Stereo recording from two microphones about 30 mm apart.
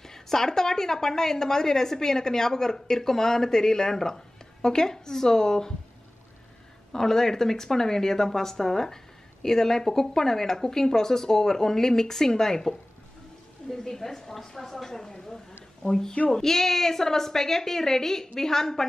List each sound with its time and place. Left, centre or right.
0.0 s speech: centre
6.9 s speech: centre